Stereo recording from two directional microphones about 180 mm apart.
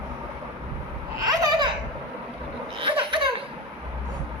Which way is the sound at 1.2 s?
20° right (ahead or behind).